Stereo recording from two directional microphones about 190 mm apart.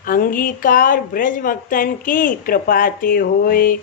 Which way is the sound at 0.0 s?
50° left (ahead or behind).